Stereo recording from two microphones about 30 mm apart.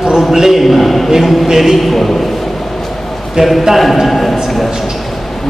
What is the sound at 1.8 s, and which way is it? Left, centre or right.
Speech, centre.